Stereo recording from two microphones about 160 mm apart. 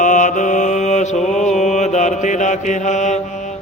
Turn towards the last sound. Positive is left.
turn(degrees=45)  # may be behind; listen again after turning